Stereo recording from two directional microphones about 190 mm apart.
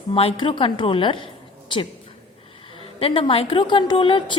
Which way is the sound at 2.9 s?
30° left (ahead or behind).